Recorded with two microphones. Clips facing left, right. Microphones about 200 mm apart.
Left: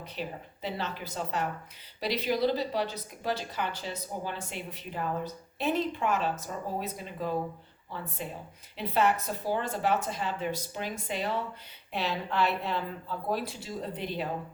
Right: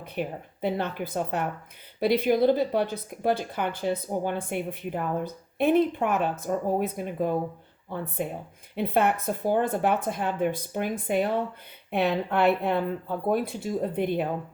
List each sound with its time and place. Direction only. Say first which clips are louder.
0.0 s speech: right 6 dB; 55° right (ahead or behind)